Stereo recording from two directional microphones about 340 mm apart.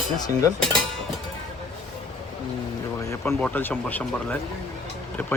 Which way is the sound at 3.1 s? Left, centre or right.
Centre.